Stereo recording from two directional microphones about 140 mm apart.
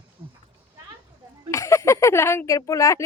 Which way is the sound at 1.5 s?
20° left (ahead or behind).